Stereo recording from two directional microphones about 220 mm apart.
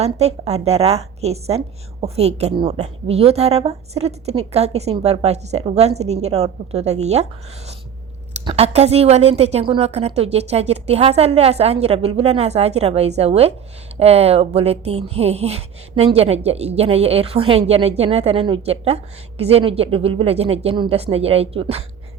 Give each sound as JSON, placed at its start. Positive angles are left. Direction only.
{"t": 0.0, "sound": "a woman's voice", "side_deg": -30}
{"t": 8.4, "sound": "a woman's voice", "side_deg": -25}